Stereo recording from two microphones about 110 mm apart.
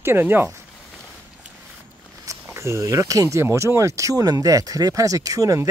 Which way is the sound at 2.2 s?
30° right (ahead or behind).